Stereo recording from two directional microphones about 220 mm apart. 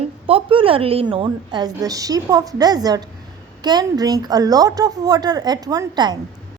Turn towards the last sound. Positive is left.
turn(degrees=-20)  # may be behind; listen again after turning